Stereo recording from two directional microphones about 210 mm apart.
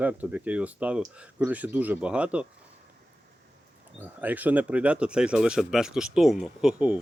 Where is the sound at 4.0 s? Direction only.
10° right (ahead or behind).